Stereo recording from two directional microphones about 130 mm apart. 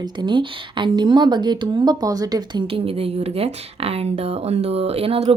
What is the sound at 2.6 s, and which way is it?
Speech, 45° right (ahead or behind).